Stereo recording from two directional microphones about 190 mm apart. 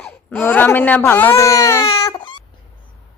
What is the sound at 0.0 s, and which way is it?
Speech, 10° left (ahead or behind).